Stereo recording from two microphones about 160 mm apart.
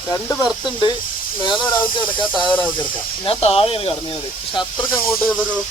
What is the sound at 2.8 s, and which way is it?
Speech, 35° left (ahead or behind).